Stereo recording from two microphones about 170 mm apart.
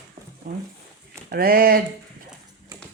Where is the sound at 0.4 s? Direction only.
60° right (ahead or behind).